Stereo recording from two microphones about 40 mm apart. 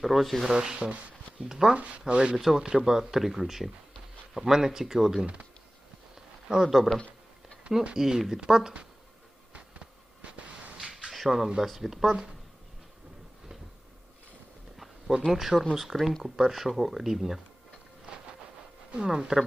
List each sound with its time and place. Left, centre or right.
0.0 s speech: centre
0.5 s speech: right
1.5 s speech: centre
1.7 s speech: right
2.3 s speech: centre
5.2 s speech: right
6.1 s a sound: centre
7.9 s speech: centre
9.5 s a sound: right
11.1 s speech: centre
14.8 s a sound: centre
15.3 s speech: centre
18.1 s a sound: right
19.0 s speech: centre